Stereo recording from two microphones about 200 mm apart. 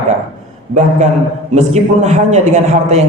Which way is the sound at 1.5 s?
35° right (ahead or behind).